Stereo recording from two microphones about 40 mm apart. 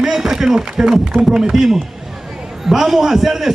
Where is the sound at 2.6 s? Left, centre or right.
Centre.